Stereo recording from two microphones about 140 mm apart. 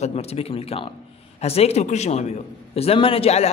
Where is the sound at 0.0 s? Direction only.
45° left (ahead or behind).